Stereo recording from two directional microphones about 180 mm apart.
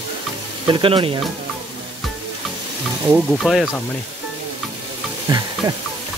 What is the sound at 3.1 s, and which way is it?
Speech, centre (ahead or behind).